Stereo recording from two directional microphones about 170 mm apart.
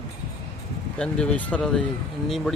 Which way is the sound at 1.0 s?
5° left (ahead or behind).